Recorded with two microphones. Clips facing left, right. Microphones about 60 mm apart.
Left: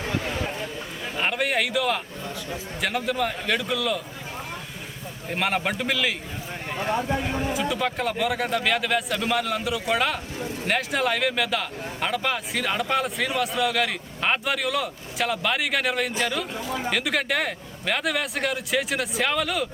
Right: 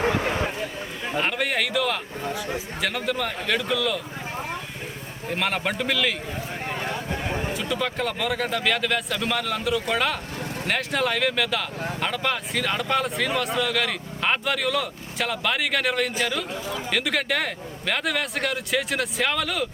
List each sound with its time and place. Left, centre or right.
0.0 s a sound: right
1.2 s a man's voice: centre
5.3 s speech: centre
6.8 s speech: left
7.5 s speech: centre